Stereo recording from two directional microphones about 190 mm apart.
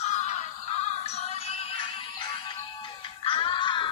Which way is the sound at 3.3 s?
25° left (ahead or behind).